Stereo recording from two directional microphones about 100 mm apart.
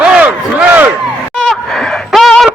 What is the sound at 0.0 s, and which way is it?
Battle cry, 15° right (ahead or behind).